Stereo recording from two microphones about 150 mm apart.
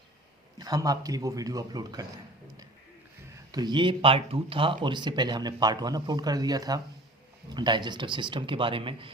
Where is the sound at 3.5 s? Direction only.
30° right (ahead or behind).